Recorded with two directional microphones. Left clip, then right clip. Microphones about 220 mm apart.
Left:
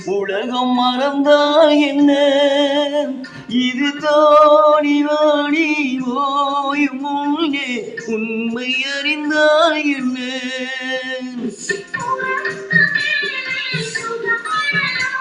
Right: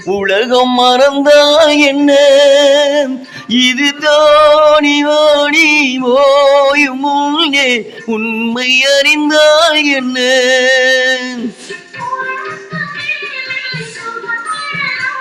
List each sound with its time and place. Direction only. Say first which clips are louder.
0.1 s music: right 9 dB; 20° right (ahead or behind)